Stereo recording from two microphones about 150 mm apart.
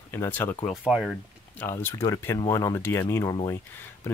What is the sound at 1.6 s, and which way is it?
Speech, 15° left (ahead or behind).